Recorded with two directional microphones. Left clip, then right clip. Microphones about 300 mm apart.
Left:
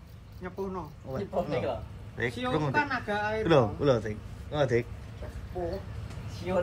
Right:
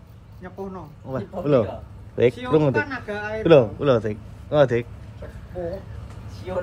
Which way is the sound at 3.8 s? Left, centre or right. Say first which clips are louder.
Right 6 dB; centre.